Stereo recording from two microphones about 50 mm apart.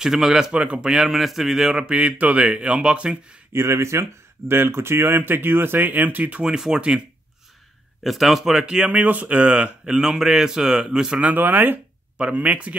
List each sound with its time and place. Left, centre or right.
0.0 s speech: centre
1.8 s speech: right
3.5 s speech: right
8.0 s speech: centre
8.6 s speech: centre
8.9 s speech: right
9.9 s speech: centre
11.3 s speech: right
12.2 s speech: right